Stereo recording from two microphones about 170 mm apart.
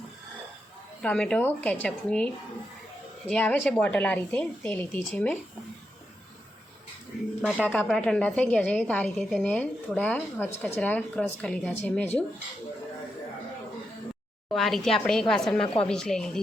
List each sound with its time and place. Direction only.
1.0 s speech: 5° left (ahead or behind)
7.4 s speech: centre (ahead or behind)
14.5 s a woman's voice: centre (ahead or behind)
15.6 s a woman's voice: 35° left (ahead or behind)
15.9 s a woman's voice: 5° left (ahead or behind)